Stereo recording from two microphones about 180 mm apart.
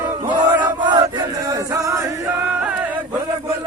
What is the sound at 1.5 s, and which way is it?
Music, 20° right (ahead or behind).